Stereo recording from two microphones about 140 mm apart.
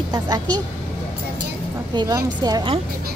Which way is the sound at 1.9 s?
30° right (ahead or behind).